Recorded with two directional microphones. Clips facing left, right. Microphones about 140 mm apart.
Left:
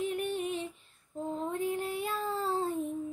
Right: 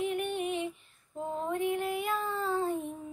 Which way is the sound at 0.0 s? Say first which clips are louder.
Right 1 dB; 35° left (ahead or behind).